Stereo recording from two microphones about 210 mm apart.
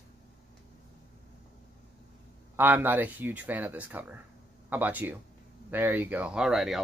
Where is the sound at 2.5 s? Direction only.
10° right (ahead or behind).